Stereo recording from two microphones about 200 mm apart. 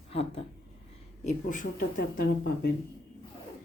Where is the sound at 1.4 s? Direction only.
45° left (ahead or behind).